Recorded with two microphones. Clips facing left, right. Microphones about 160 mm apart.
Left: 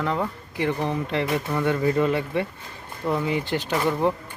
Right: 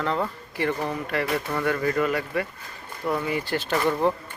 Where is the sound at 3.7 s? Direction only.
5° left (ahead or behind).